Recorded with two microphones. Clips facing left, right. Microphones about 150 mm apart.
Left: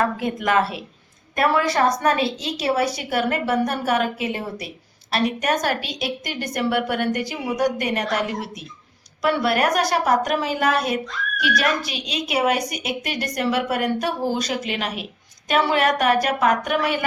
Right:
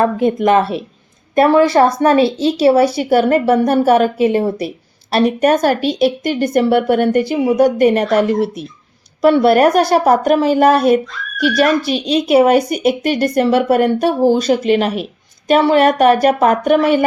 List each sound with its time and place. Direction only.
0.0 s speech: 25° right (ahead or behind)
9.2 s speech: 30° right (ahead or behind)